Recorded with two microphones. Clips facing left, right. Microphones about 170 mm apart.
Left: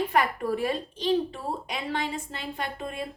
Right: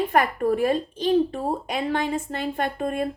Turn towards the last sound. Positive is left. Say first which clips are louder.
# right 8 dB
turn(degrees=-55)  # may be behind; listen again after turning